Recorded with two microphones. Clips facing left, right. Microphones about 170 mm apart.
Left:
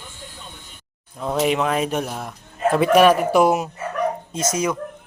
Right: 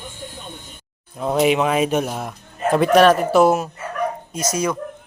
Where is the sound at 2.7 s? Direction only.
5° left (ahead or behind).